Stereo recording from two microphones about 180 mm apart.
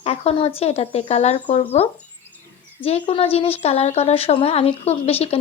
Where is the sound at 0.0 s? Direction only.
35° left (ahead or behind).